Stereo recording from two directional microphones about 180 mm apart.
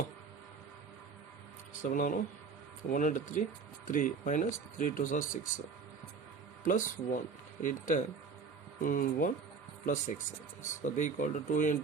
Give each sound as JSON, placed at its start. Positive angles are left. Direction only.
{"t": 1.8, "sound": "speech", "side_deg": 50}
{"t": 6.7, "sound": "speech", "side_deg": 45}